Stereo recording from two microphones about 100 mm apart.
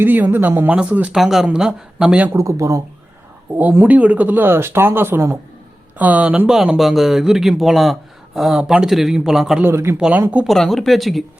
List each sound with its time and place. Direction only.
0.0 s speech: 20° right (ahead or behind)
1.1 s speech: 5° right (ahead or behind)
2.3 s speech: 30° right (ahead or behind)
3.5 s speech: 15° right (ahead or behind)
6.0 s speech: 15° right (ahead or behind)
9.6 s speech: 25° right (ahead or behind)
10.0 s speech: 15° right (ahead or behind)
10.4 s speech: centre (ahead or behind)